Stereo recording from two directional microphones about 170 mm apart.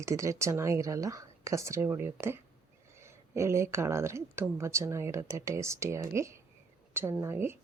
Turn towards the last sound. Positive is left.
turn(degrees=-15)  # may be behind; listen again after turning